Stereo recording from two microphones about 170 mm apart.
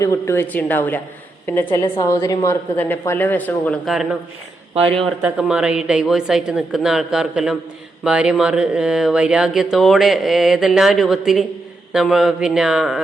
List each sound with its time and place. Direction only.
0.0 s a woman's voice: 15° left (ahead or behind)
3.8 s speech: centre (ahead or behind)
4.7 s speech: 35° right (ahead or behind)
5.2 s speech: 5° right (ahead or behind)